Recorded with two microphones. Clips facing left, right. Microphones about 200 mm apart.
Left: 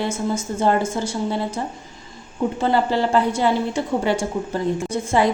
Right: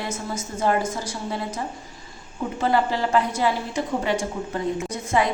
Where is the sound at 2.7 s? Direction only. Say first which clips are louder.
Left 1 dB; 30° left (ahead or behind).